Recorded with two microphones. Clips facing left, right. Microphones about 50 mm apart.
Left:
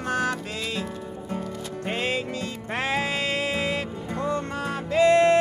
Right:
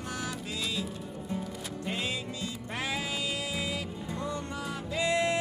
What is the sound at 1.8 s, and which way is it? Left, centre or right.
Music, left.